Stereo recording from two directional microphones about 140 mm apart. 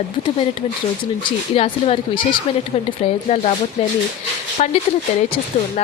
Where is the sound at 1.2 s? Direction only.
40° left (ahead or behind).